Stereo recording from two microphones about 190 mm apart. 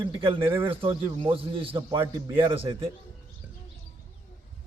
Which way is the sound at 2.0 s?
15° right (ahead or behind).